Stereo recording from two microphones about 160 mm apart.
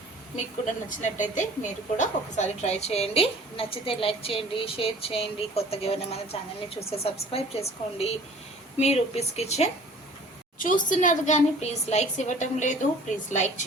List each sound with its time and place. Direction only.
0.6 s a woman's voice: 50° left (ahead or behind)
10.6 s a woman's voice: 55° left (ahead or behind)